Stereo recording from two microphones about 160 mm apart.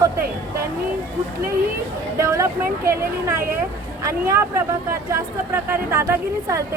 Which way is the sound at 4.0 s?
20° right (ahead or behind).